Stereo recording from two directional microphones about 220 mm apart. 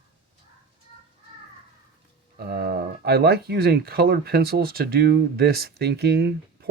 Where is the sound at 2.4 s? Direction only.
45° right (ahead or behind).